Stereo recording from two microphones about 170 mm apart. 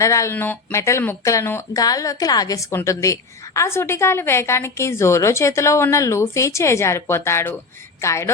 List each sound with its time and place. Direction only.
0.0 s speech: 20° left (ahead or behind)